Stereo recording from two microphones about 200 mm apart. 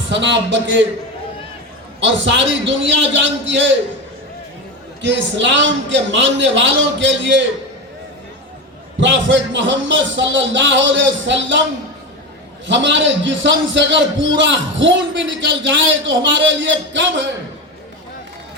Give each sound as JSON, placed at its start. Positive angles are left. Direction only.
{"t": 0.1, "sound": "a man's voice", "side_deg": -65}
{"t": 2.0, "sound": "a man's voice", "side_deg": -65}
{"t": 5.0, "sound": "a man's voice", "side_deg": -65}
{"t": 9.0, "sound": "a man's voice", "side_deg": -65}
{"t": 12.6, "sound": "a man's voice", "side_deg": -65}